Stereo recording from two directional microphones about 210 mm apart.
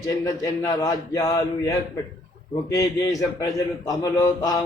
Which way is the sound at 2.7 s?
15° left (ahead or behind).